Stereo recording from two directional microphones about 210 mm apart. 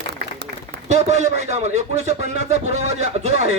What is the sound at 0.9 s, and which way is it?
Speech, 35° right (ahead or behind).